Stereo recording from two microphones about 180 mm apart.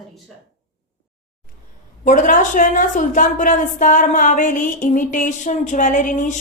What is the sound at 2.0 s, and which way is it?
A woman's voice, 45° left (ahead or behind).